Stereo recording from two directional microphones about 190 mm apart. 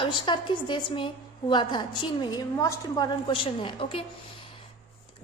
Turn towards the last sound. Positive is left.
turn(degrees=30)  # may be behind; listen again after turning